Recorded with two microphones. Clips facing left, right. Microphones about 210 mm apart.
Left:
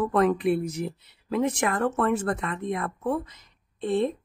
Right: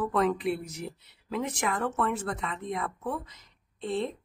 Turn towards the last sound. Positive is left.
turn(degrees=55)  # may be behind; listen again after turning